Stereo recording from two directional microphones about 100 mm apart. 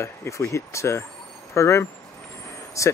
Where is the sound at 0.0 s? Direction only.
25° left (ahead or behind).